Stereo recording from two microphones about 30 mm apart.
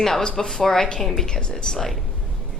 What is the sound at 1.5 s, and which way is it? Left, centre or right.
Speech, centre.